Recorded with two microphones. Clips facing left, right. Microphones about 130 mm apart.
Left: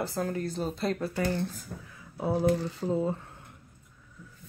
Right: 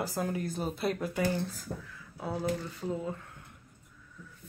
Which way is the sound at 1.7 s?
90° right.